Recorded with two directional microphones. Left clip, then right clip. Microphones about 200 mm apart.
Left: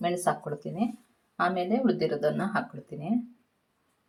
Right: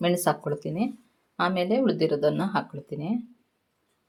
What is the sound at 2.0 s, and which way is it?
Speech, 30° right (ahead or behind).